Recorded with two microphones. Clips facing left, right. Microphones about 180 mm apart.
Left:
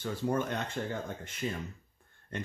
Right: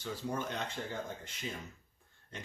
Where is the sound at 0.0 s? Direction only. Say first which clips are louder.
Left 6 dB; 55° left (ahead or behind).